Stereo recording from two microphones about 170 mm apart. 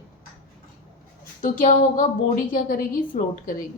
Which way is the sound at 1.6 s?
50° left (ahead or behind).